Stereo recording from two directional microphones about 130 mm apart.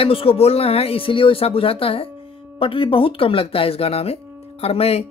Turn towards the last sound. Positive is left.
turn(degrees=50)  # may be behind; listen again after turning